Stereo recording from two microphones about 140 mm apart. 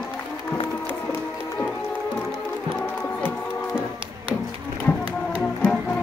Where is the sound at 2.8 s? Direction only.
10° left (ahead or behind).